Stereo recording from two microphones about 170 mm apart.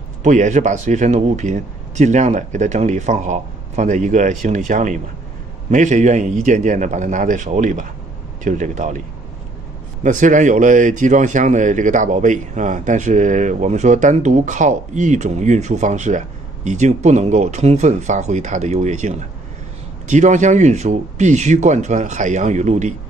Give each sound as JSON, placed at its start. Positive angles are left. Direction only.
{"t": 0.2, "sound": "speech", "side_deg": -45}
{"t": 10.0, "sound": "speech", "side_deg": -50}